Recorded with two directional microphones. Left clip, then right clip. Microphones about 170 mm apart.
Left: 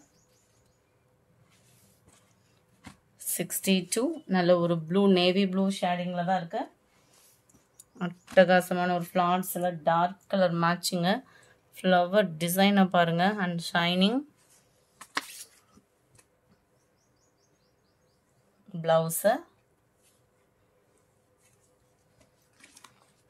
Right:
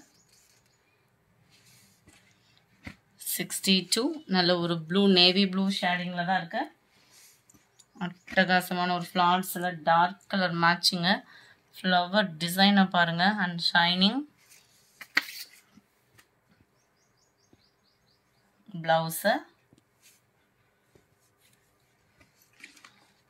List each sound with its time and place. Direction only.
3.3 s speech: 75° left (ahead or behind)
7.7 s speech: 75° left (ahead or behind)
18.8 s a woman's voice: 90° left